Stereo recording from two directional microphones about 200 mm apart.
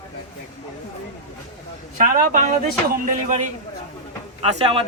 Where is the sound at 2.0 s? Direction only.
40° right (ahead or behind).